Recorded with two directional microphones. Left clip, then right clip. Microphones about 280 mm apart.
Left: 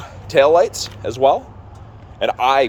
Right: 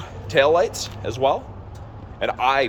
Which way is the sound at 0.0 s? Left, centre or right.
Centre.